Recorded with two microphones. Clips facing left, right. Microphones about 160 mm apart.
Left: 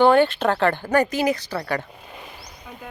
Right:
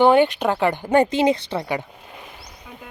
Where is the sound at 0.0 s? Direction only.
15° right (ahead or behind).